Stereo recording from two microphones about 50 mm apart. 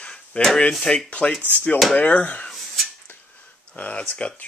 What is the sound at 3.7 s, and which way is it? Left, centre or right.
Speech, left.